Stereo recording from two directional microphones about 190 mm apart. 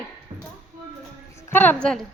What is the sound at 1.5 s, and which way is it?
Speech, 10° left (ahead or behind).